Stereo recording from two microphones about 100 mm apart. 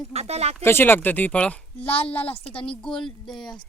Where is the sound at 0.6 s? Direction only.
20° left (ahead or behind); by 3.5 s centre (ahead or behind).